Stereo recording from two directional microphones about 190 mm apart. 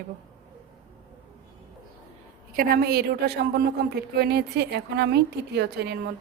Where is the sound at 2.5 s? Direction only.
50° right (ahead or behind).